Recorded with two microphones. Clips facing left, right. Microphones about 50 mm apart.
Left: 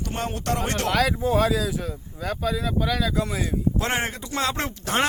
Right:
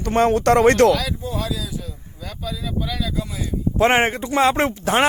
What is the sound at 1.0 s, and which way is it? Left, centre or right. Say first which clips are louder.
Speech: left 6 dB; left.